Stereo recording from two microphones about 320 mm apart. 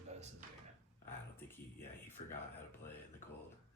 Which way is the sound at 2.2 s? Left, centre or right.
Centre.